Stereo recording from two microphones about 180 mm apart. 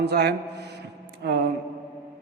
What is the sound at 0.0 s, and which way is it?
A man's voice, 65° right (ahead or behind).